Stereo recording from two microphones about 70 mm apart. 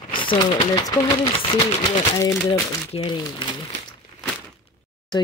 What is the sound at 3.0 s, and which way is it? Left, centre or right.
Speech, left.